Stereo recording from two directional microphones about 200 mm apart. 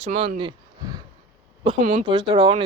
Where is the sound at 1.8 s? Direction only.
45° right (ahead or behind).